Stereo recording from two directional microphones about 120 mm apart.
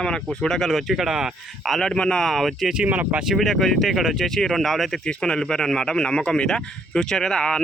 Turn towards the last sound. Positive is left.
turn(degrees=5)  # may be behind; listen again after turning